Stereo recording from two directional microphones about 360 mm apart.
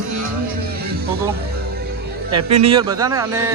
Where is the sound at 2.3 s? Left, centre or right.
Right.